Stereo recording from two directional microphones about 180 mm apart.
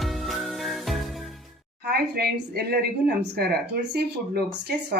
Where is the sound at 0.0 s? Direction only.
Centre (ahead or behind).